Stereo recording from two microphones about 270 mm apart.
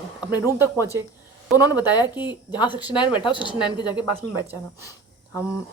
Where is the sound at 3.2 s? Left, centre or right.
Centre.